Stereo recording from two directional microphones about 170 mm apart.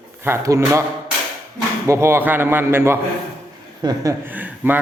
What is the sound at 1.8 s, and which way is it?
A man's voice, 15° right (ahead or behind).